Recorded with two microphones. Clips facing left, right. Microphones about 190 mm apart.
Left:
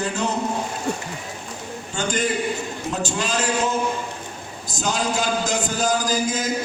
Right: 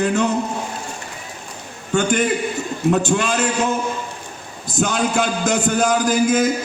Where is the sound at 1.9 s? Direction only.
60° right (ahead or behind).